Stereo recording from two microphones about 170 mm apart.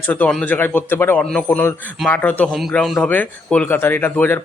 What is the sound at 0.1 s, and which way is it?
Speech, 10° left (ahead or behind).